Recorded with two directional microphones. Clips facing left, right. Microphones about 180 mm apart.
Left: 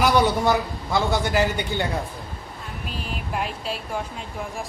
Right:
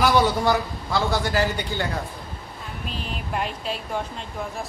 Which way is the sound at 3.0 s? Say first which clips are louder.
Even; centre (ahead or behind).